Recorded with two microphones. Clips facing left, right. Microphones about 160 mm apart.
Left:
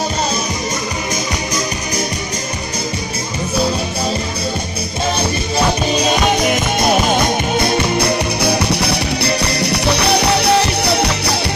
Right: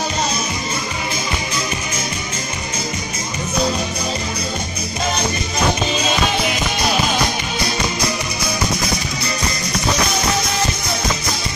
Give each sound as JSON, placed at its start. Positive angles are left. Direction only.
{"t": 5.9, "sound": "music", "side_deg": 45}